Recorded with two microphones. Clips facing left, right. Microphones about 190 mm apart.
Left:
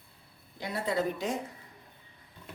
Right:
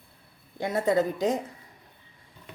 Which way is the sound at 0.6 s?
45° right (ahead or behind).